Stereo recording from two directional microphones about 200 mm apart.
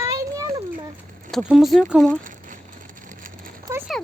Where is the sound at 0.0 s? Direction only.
15° right (ahead or behind).